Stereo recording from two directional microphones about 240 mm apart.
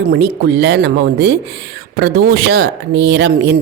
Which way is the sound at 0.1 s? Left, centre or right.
Right.